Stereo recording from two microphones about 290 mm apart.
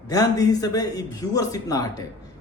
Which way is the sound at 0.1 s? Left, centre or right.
Centre.